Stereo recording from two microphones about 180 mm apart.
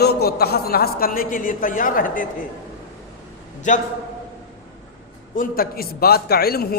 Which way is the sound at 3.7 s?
45° left (ahead or behind).